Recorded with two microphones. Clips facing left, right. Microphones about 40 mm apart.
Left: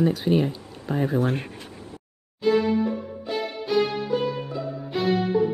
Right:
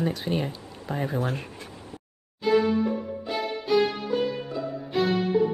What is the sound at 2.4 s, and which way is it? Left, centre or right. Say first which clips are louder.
Music: left 1 dB; centre.